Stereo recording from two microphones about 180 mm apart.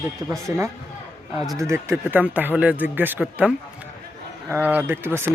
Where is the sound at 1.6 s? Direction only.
15° right (ahead or behind).